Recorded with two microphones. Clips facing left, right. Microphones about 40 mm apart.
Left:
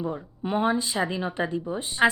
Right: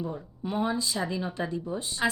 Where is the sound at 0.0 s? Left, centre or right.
Left.